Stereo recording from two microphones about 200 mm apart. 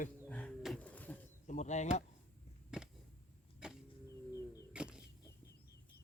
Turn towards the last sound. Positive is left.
turn(degrees=-5)  # may be behind; listen again after turning